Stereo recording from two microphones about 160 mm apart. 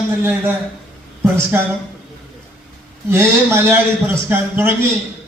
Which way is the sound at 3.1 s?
15° right (ahead or behind).